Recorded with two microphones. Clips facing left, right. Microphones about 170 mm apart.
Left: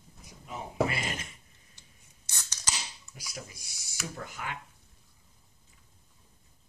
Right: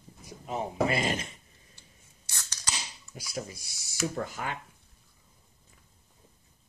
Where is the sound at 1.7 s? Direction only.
15° left (ahead or behind).